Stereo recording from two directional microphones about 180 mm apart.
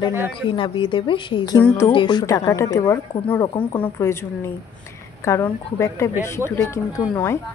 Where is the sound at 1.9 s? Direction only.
25° left (ahead or behind).